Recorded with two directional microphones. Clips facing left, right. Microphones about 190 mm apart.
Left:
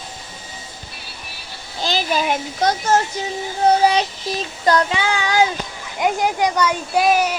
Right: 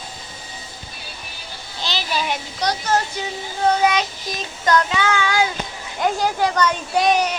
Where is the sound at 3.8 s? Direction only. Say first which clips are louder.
Left 2 dB; 30° left (ahead or behind).